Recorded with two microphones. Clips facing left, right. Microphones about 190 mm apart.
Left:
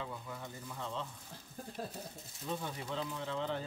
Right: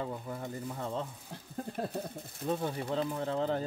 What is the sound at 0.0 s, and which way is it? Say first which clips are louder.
Speech: right 6 dB; 45° right (ahead or behind).